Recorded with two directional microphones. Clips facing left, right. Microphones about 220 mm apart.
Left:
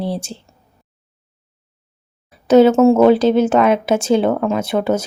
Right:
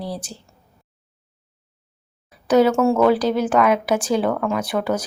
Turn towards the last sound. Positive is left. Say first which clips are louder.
# left 4 dB
turn(degrees=25)  # may be behind; listen again after turning